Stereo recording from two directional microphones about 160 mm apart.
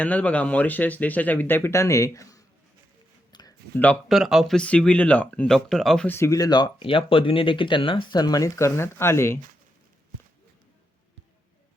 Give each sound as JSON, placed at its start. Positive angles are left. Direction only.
{"t": 0.0, "sound": "speech", "side_deg": 10}
{"t": 3.3, "sound": "a sound", "side_deg": 25}
{"t": 4.1, "sound": "speech", "side_deg": 0}
{"t": 6.1, "sound": "speech", "side_deg": 20}